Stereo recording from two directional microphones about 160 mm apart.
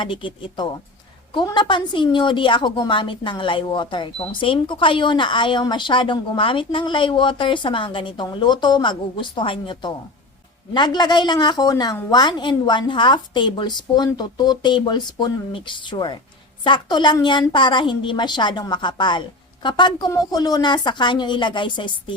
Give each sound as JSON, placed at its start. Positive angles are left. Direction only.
{"t": 0.0, "sound": "a woman's voice", "side_deg": 30}